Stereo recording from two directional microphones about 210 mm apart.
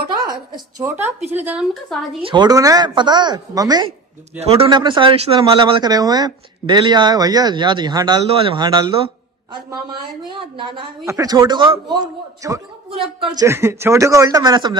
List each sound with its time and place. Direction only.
0.5 s a man's voice: 15° right (ahead or behind)
1.4 s speech: 5° right (ahead or behind)
2.2 s speech: 20° right (ahead or behind)
10.6 s a man's voice: 25° right (ahead or behind)